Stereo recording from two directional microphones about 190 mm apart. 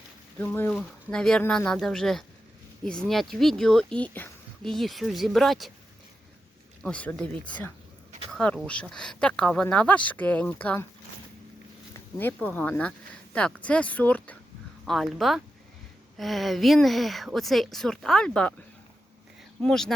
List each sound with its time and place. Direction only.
0.3 s speech: 10° left (ahead or behind)
6.8 s speech: 5° left (ahead or behind)
12.2 s speech: 10° left (ahead or behind)
19.6 s speech: 5° left (ahead or behind)